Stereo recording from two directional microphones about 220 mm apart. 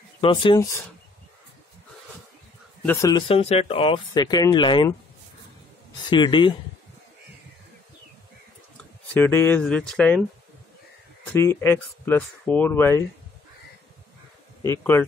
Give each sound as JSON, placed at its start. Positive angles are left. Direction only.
{"t": 0.2, "sound": "speech", "side_deg": 20}
{"t": 2.8, "sound": "speech", "side_deg": 10}
{"t": 6.0, "sound": "speech", "side_deg": 20}
{"t": 9.1, "sound": "speech", "side_deg": 10}
{"t": 11.3, "sound": "speech", "side_deg": 10}
{"t": 14.6, "sound": "speech", "side_deg": 10}